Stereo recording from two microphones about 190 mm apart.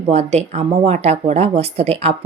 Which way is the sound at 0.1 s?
35° right (ahead or behind).